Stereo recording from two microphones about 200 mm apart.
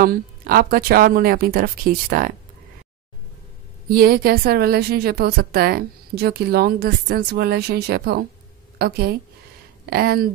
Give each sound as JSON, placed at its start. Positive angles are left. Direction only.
{"t": 0.0, "sound": "a woman's voice", "side_deg": -45}
{"t": 3.9, "sound": "a woman's voice", "side_deg": -50}